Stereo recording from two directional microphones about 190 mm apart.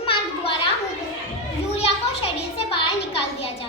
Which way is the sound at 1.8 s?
30° left (ahead or behind).